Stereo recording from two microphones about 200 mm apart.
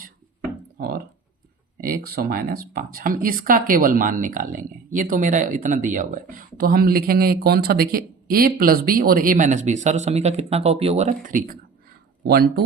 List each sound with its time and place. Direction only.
0.8 s speech: 45° right (ahead or behind)
2.0 s a woman's voice: 50° right (ahead or behind)